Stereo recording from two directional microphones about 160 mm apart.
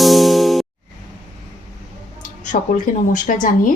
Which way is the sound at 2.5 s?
60° left (ahead or behind).